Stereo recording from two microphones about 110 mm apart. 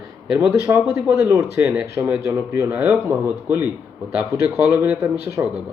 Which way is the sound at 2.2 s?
25° right (ahead or behind).